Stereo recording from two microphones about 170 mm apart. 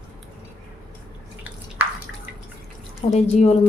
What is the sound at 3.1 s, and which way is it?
Speech, 40° left (ahead or behind).